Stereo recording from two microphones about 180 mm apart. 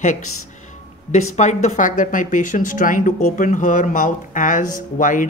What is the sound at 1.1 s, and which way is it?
Speech, 40° left (ahead or behind).